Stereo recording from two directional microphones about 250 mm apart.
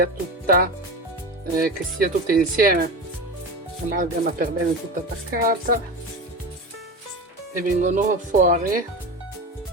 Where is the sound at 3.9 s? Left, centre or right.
Right.